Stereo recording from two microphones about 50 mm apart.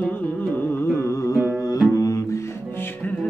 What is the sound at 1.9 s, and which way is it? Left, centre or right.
Music, left.